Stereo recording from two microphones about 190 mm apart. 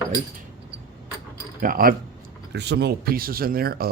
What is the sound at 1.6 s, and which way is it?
Speech, 50° right (ahead or behind).